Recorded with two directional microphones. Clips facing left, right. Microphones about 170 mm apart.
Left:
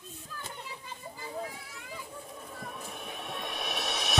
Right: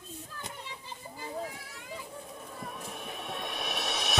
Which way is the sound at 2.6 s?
Centre (ahead or behind).